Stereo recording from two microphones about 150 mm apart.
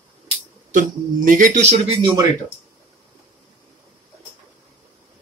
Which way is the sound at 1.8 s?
30° right (ahead or behind).